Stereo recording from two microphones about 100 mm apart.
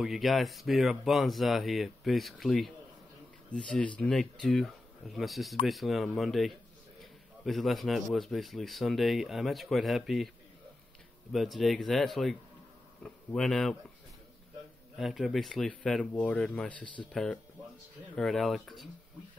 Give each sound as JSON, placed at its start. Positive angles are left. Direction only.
{"t": 0.0, "sound": "speech", "side_deg": 0}
{"t": 11.3, "sound": "speech", "side_deg": 0}
{"t": 15.0, "sound": "speech", "side_deg": 0}
{"t": 16.8, "sound": "speech", "side_deg": 55}
{"t": 17.1, "sound": "speech", "side_deg": 5}